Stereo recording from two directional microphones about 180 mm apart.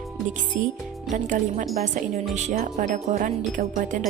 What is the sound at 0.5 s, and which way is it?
Speech, 45° right (ahead or behind).